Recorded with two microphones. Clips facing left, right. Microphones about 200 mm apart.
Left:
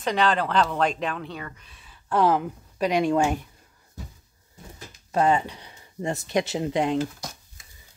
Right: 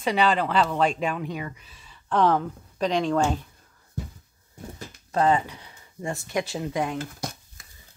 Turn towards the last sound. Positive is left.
turn(degrees=25)  # may be behind; listen again after turning